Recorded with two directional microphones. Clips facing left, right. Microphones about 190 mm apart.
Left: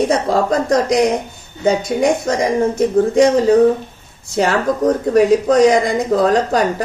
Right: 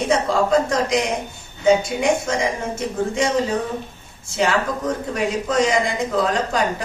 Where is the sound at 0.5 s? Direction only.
40° left (ahead or behind).